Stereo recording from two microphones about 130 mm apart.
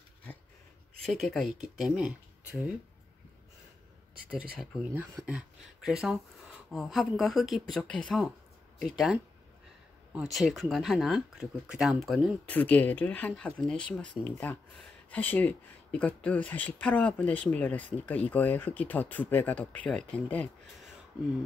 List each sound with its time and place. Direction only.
1.0 s speech: centre (ahead or behind)
4.3 s speech: 10° right (ahead or behind)
10.3 s speech: centre (ahead or behind)
12.4 s speech: 15° left (ahead or behind)